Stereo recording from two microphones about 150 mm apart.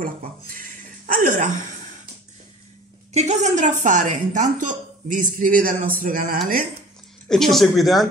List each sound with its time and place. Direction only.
0.0 s speech: 70° right (ahead or behind)
3.1 s a woman's voice: 50° right (ahead or behind); by 6.3 s 65° right (ahead or behind)
7.2 s speech: centre (ahead or behind)